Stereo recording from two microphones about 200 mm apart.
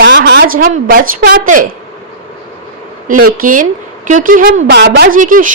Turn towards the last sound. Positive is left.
turn(degrees=-40)  # may be behind; listen again after turning